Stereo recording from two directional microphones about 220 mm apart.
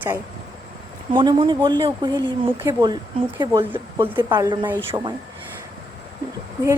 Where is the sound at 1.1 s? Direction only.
20° right (ahead or behind).